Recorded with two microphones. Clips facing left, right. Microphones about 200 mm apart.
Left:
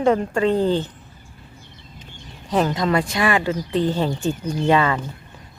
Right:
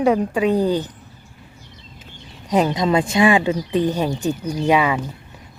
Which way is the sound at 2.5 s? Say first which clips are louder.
Right 2 dB; 15° right (ahead or behind).